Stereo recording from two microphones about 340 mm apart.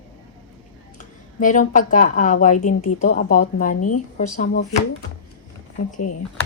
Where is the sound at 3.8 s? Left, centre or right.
Left.